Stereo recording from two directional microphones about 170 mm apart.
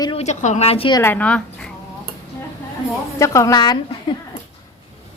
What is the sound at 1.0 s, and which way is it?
Speech, 10° left (ahead or behind).